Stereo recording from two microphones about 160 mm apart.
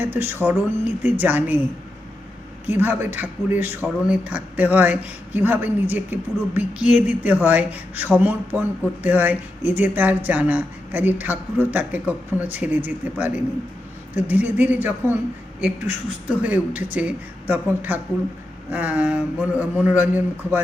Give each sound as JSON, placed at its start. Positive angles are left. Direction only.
{"t": 0.0, "sound": "a woman's voice", "side_deg": -10}
{"t": 2.6, "sound": "a woman's voice", "side_deg": -10}